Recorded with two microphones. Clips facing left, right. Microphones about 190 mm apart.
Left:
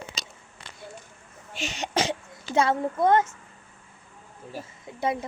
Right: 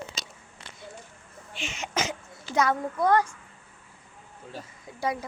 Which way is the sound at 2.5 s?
25° left (ahead or behind).